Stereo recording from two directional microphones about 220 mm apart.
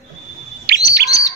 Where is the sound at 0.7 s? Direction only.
45° right (ahead or behind).